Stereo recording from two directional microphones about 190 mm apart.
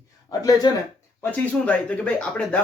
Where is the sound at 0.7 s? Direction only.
25° left (ahead or behind).